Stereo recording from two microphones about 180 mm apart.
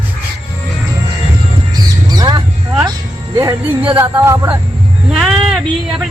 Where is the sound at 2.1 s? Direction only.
20° right (ahead or behind).